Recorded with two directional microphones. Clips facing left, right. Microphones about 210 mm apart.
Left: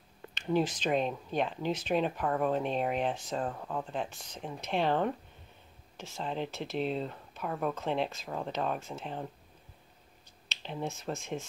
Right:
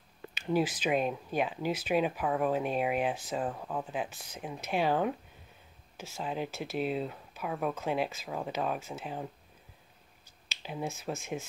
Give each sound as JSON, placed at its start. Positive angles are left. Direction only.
{"t": 0.3, "sound": "speech", "side_deg": -5}
{"t": 10.6, "sound": "speech", "side_deg": -5}